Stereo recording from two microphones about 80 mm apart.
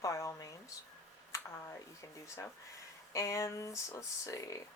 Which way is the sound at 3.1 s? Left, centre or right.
Left.